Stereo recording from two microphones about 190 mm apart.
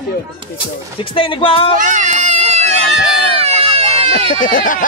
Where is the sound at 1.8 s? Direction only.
40° right (ahead or behind).